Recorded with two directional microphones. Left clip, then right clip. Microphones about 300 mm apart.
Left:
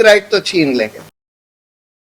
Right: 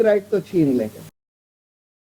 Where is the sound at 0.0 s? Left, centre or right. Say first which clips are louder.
Left 8 dB; centre.